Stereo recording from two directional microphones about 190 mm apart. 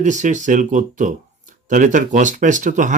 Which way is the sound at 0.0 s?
40° right (ahead or behind).